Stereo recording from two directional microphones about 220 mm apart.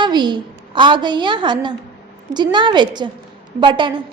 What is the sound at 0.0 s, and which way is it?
A woman's voice, 20° right (ahead or behind).